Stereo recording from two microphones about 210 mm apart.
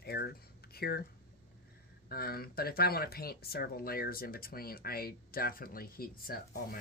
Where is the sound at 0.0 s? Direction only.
50° left (ahead or behind).